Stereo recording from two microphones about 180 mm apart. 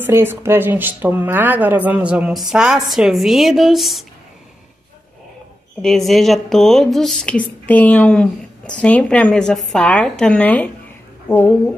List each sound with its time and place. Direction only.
0.0 s speech: 10° right (ahead or behind)
5.8 s speech: centre (ahead or behind)